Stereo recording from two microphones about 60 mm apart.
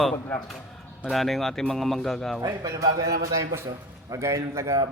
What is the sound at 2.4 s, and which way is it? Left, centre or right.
A man's voice, right.